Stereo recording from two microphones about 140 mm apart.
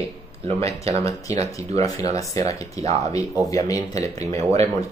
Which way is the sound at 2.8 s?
55° right (ahead or behind).